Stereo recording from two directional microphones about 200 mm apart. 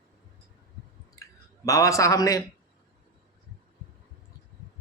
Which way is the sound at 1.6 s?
15° left (ahead or behind).